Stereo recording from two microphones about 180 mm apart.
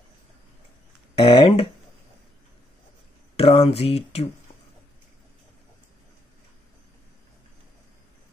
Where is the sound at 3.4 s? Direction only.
30° left (ahead or behind).